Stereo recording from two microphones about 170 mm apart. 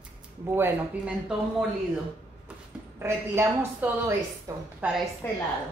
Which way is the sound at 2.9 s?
15° right (ahead or behind).